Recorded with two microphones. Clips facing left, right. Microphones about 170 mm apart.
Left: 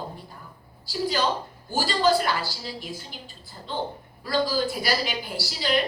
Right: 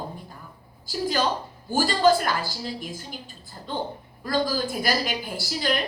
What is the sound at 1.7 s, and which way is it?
A woman's voice, 50° right (ahead or behind).